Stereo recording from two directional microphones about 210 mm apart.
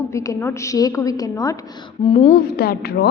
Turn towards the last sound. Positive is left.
turn(degrees=50)  # may be behind; listen again after turning